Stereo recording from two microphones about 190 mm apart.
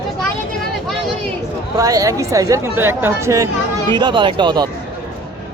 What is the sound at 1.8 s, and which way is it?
A woman's voice, 15° right (ahead or behind).